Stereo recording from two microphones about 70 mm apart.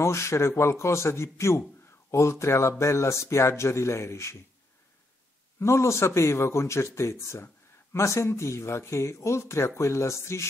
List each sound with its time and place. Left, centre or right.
0.0 s speech: left
5.6 s speech: left